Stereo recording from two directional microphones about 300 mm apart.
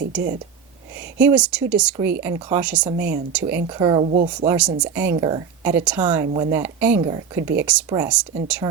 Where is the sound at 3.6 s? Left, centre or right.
Centre.